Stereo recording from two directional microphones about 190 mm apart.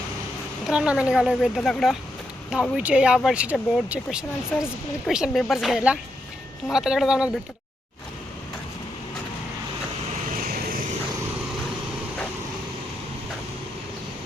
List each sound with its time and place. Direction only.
0.7 s speech: 5° right (ahead or behind)
10.3 s vehicle: 50° right (ahead or behind)